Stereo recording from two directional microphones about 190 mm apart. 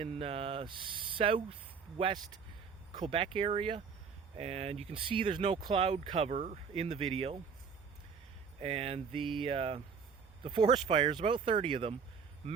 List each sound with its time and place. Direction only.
0.0 s speech: 30° right (ahead or behind)
8.6 s speech: 30° right (ahead or behind)